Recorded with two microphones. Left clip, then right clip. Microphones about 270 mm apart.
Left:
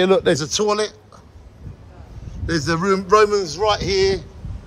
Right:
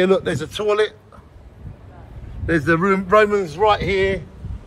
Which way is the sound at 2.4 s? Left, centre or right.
Centre.